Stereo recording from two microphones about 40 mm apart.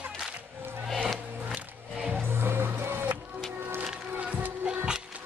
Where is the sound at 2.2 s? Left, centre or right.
Right.